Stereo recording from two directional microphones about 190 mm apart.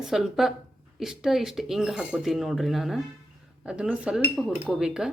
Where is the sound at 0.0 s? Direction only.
Centre (ahead or behind).